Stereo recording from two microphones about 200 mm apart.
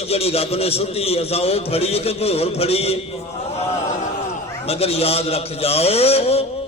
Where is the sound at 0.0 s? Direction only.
30° left (ahead or behind).